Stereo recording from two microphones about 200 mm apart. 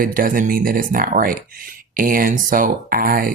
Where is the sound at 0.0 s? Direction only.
45° right (ahead or behind).